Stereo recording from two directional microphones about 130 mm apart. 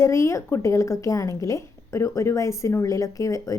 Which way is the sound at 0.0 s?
20° left (ahead or behind).